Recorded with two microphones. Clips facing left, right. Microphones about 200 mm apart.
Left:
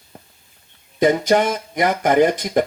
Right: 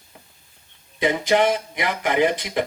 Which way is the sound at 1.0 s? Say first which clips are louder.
Left 3 dB; 45° left (ahead or behind).